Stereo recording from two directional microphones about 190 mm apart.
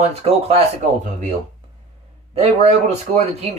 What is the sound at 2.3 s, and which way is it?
Speech, 35° right (ahead or behind).